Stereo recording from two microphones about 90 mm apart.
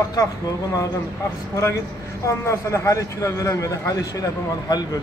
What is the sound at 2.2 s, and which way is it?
A man's voice, 30° left (ahead or behind).